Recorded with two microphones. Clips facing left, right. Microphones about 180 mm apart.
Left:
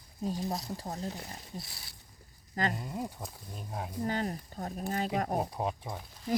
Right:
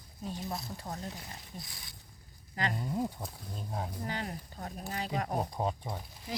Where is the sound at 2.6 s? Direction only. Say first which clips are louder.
Left 3 dB; 40° left (ahead or behind).